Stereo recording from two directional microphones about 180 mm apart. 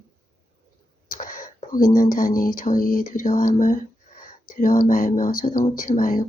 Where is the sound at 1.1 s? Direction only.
45° left (ahead or behind).